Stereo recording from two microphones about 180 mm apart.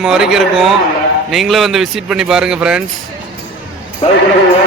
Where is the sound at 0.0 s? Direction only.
5° right (ahead or behind).